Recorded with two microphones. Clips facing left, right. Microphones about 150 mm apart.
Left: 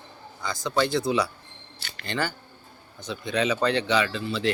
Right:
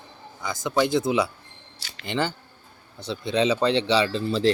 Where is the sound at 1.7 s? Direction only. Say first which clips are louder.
Left 3 dB; 55° left (ahead or behind).